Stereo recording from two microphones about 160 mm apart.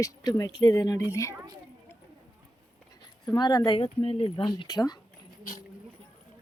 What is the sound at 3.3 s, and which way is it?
Speech, 25° left (ahead or behind).